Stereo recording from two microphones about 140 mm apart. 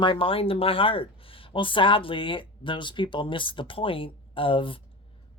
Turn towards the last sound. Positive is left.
turn(degrees=35)  # may be behind; listen again after turning